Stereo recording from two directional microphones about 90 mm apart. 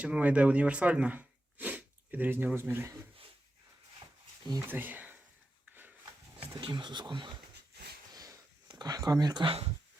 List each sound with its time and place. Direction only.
0.0 s speech: 15° right (ahead or behind)
4.6 s speech: 20° right (ahead or behind)
6.7 s speech: 60° right (ahead or behind)
8.1 s a sound: 45° right (ahead or behind)
9.4 s speech: 90° right